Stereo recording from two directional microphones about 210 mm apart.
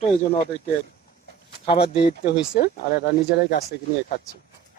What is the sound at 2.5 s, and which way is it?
Speech, 50° left (ahead or behind).